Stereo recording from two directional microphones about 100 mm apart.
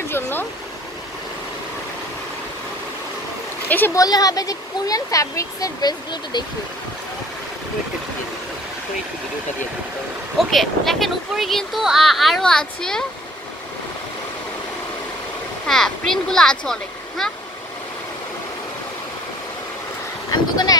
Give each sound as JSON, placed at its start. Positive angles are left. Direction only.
{"t": 0.1, "sound": "speech", "side_deg": 20}
{"t": 3.6, "sound": "speech", "side_deg": 20}
{"t": 3.9, "sound": "speech", "side_deg": 40}
{"t": 10.3, "sound": "speech", "side_deg": 0}
{"t": 15.6, "sound": "speech", "side_deg": 5}
{"t": 20.2, "sound": "a sound", "side_deg": 40}